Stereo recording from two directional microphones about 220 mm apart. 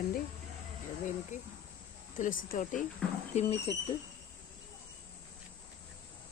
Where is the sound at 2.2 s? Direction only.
40° left (ahead or behind).